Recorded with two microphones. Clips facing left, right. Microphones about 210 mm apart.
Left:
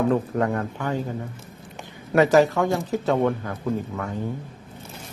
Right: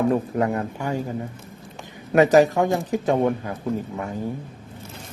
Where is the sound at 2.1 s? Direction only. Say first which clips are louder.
Right 2 dB; 15° right (ahead or behind).